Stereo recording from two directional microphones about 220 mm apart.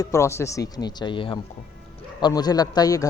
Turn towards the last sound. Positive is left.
turn(degrees=15)  # may be behind; listen again after turning